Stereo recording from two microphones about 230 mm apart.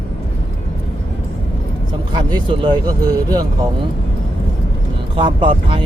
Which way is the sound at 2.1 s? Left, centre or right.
Centre.